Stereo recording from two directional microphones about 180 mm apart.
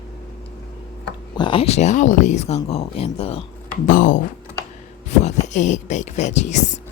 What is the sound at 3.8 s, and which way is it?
Speech, 45° left (ahead or behind).